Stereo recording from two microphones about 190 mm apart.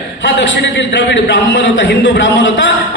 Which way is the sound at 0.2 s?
70° left (ahead or behind).